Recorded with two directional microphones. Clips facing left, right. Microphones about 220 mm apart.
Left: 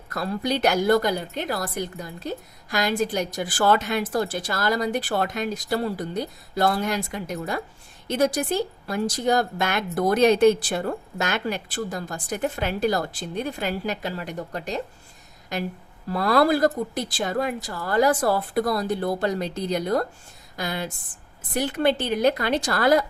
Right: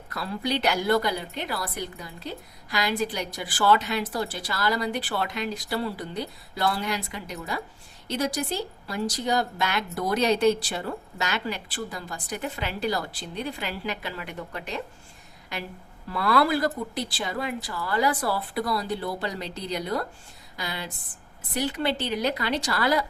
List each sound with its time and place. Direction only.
0.1 s a woman's voice: 45° left (ahead or behind)